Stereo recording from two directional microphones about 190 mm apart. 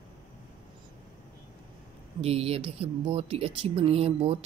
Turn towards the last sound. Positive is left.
turn(degrees=-30)  # may be behind; listen again after turning